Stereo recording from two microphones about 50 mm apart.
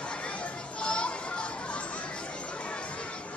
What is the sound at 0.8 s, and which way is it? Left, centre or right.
Children playing, left.